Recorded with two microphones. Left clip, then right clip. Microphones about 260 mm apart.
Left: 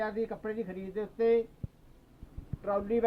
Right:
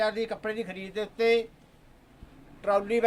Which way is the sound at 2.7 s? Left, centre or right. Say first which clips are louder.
Right 5 dB; centre.